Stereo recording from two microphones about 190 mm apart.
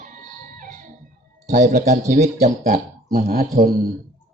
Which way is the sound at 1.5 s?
40° right (ahead or behind).